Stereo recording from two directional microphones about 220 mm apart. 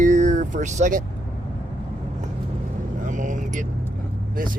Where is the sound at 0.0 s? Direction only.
35° right (ahead or behind).